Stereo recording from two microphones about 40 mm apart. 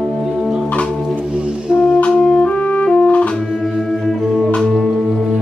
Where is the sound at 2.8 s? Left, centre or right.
Left.